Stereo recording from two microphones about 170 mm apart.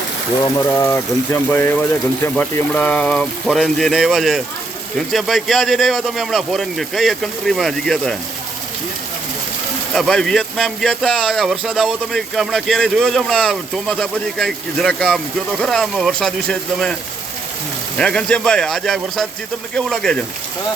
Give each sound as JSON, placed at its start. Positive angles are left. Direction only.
{"t": 0.4, "sound": "speech", "side_deg": 15}
{"t": 9.9, "sound": "speech", "side_deg": 0}